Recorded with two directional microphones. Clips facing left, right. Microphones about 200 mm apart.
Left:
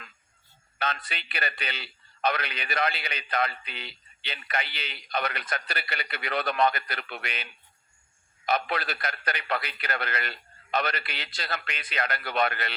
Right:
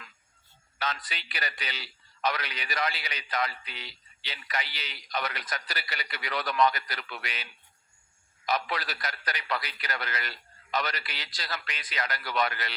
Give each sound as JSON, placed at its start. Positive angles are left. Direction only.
{"t": 0.8, "sound": "a man's voice", "side_deg": 60}